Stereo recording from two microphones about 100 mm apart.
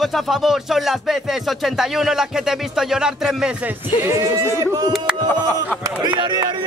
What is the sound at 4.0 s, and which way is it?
Speech, 30° right (ahead or behind).